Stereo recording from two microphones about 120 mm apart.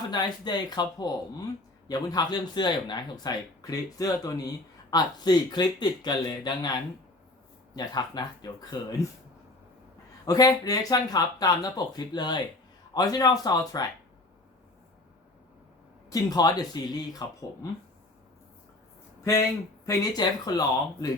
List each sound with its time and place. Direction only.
0.1 s speech: 35° left (ahead or behind)
7.8 s speech: 35° left (ahead or behind)
10.2 s a man's voice: 35° left (ahead or behind)
16.0 s speech: 30° left (ahead or behind)
19.8 s speech: 30° left (ahead or behind)